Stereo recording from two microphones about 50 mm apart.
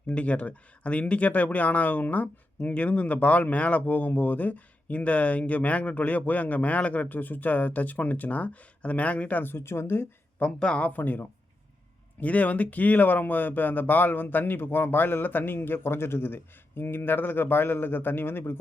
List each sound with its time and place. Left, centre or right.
0.1 s speech: left
9.4 s speech: left
10.4 s speech: left